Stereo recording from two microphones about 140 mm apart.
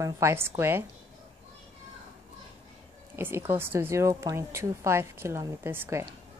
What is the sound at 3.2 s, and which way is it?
Speech, 15° right (ahead or behind).